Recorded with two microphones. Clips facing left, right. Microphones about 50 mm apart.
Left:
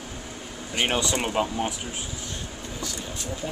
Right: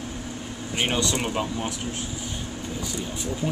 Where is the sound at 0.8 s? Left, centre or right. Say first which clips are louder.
Even; centre.